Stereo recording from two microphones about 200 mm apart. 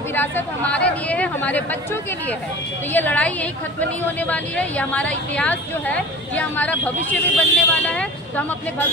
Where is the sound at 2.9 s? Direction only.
10° left (ahead or behind).